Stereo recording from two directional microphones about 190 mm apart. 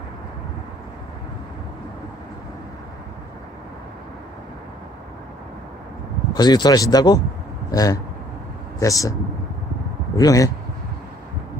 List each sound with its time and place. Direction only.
6.3 s speech: 20° left (ahead or behind)
10.2 s speech: 20° left (ahead or behind)